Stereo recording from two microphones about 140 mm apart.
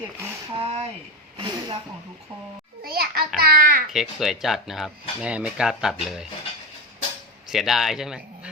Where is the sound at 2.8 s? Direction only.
90° right.